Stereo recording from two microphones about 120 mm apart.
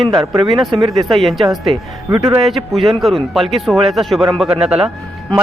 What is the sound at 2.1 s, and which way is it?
Speech, 25° right (ahead or behind).